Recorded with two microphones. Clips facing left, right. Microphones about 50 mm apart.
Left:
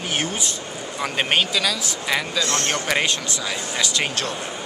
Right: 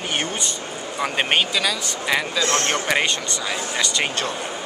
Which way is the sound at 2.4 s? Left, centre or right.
Right.